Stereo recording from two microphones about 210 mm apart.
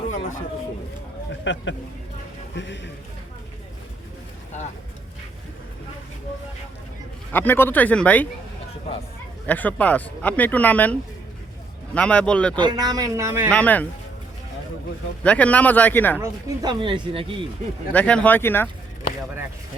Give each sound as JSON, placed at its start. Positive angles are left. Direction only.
{"t": 0.1, "sound": "a sound", "side_deg": 40}
{"t": 1.3, "sound": "speech", "side_deg": 60}
{"t": 7.3, "sound": "speech", "side_deg": 10}
{"t": 9.5, "sound": "speech", "side_deg": 5}
{"t": 11.9, "sound": "speech", "side_deg": 5}
{"t": 12.5, "sound": "a man's voice", "side_deg": -20}
{"t": 13.5, "sound": "speech", "side_deg": 5}
{"t": 15.2, "sound": "speech", "side_deg": 5}
{"t": 16.1, "sound": "speech", "side_deg": -15}
{"t": 17.9, "sound": "speech", "side_deg": 5}